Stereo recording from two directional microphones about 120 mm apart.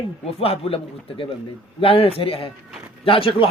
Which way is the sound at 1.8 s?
50° left (ahead or behind).